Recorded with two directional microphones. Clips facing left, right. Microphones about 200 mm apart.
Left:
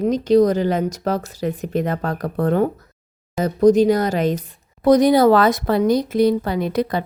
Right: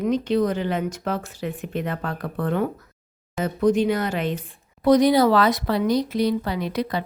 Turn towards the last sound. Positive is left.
turn(degrees=50)  # may be behind; listen again after turning